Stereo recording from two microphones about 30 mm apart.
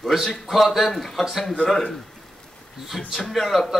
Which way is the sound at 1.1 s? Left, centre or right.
Centre.